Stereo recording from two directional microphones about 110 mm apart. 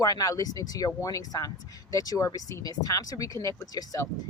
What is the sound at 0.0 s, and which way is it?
Speech, 35° left (ahead or behind).